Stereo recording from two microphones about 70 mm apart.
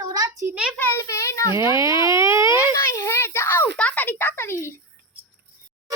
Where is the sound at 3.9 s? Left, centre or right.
Left.